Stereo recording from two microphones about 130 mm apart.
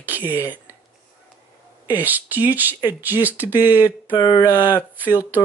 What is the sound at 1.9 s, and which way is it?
Speech, 15° right (ahead or behind).